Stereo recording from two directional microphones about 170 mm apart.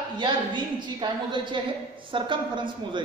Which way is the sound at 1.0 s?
25° right (ahead or behind).